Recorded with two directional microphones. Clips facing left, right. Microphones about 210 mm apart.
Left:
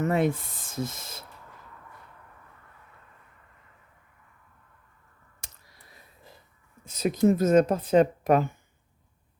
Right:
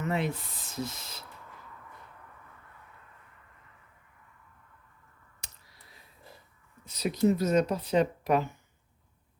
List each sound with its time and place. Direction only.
0.0 s speech: 50° left (ahead or behind)
5.4 s a sound: 50° left (ahead or behind)
6.8 s speech: 50° left (ahead or behind)